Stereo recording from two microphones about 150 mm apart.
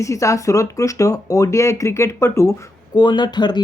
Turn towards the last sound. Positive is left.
turn(degrees=30)  # may be behind; listen again after turning